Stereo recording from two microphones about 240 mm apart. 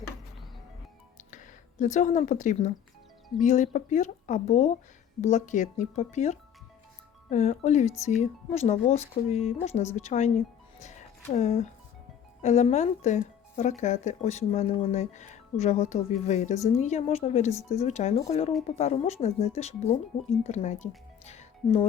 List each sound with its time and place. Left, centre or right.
1.3 s speech: left
10.8 s music: left
12.4 s speech: left